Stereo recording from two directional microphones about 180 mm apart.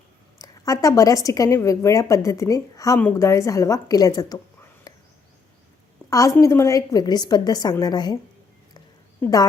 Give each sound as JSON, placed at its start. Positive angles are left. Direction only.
{"t": 0.4, "sound": "a woman's voice", "side_deg": 20}
{"t": 6.1, "sound": "a woman's voice", "side_deg": 15}
{"t": 9.2, "sound": "a woman's voice", "side_deg": 20}